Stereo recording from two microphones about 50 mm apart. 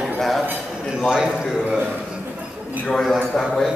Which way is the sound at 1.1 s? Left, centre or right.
Centre.